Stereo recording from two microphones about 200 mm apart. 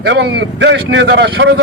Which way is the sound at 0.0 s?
60° right (ahead or behind).